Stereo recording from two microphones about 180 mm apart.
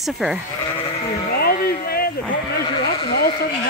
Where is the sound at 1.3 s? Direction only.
55° left (ahead or behind).